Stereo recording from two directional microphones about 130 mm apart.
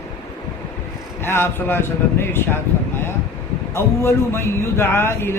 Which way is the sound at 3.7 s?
20° left (ahead or behind).